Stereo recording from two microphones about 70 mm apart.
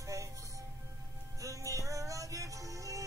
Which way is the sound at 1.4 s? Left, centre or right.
Right.